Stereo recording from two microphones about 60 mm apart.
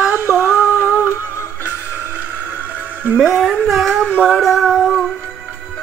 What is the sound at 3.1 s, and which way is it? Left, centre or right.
Music, centre.